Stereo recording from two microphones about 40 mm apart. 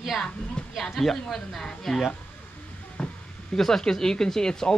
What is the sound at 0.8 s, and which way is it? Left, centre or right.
A woman's voice, centre.